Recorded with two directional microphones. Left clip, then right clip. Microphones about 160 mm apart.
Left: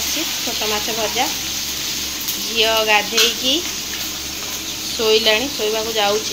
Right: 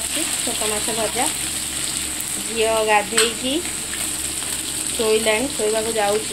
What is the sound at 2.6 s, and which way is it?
Speech, 5° right (ahead or behind).